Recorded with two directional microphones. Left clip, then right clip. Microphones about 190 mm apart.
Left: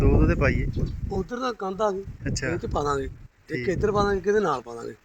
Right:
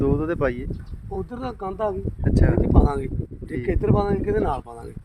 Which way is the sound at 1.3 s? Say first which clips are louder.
Left 2 dB; 30° right (ahead or behind).